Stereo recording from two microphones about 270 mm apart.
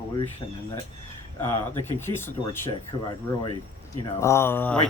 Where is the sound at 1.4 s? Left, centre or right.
Centre.